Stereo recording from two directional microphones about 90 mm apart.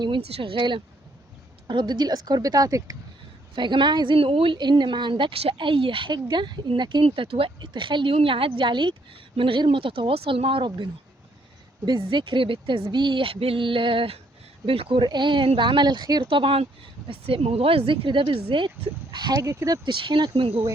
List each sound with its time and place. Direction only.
0.0 s a woman's voice: 80° right; by 2.9 s 40° right (ahead or behind)
3.5 s a woman's voice: 60° right (ahead or behind); by 4.5 s 85° right
4.5 s a woman's voice: 55° right (ahead or behind)
6.1 s a woman's voice: 55° right (ahead or behind); by 7.5 s 85° right
7.6 s a woman's voice: 60° right (ahead or behind)
11.9 s a woman's voice: 55° right (ahead or behind)
12.8 s a woman's voice: 55° right (ahead or behind); by 15.0 s 85° right
15.0 s a woman's voice: 60° right (ahead or behind)
16.3 s speech: 85° right; by 19.4 s 55° right (ahead or behind)
19.4 s speech: 35° right (ahead or behind)
19.8 s a woman's voice: 60° right (ahead or behind); by 20.6 s 90° right